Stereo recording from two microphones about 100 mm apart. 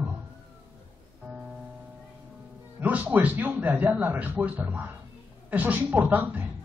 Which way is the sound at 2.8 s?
15° right (ahead or behind).